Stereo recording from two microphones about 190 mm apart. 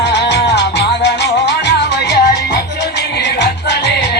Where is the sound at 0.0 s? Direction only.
65° left (ahead or behind).